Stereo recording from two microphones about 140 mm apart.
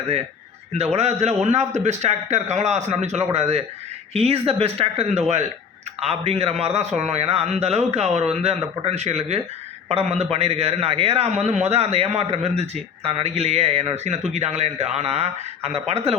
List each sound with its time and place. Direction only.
0.7 s a man's voice: 50° right (ahead or behind)